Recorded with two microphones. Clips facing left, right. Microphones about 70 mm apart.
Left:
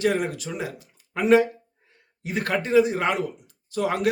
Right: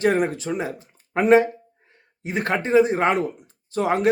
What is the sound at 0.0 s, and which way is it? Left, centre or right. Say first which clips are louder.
Speech: right 3 dB; right.